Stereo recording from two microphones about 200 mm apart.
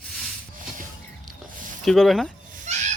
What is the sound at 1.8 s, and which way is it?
Female singing, centre (ahead or behind).